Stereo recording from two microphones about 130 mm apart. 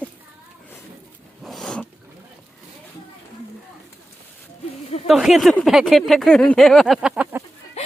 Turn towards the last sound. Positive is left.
turn(degrees=55)  # may be behind; listen again after turning